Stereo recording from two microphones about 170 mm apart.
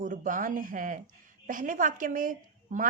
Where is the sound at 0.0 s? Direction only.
50° right (ahead or behind).